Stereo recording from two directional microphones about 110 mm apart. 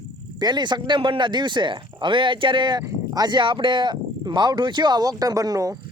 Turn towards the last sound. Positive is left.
turn(degrees=-35)  # may be behind; listen again after turning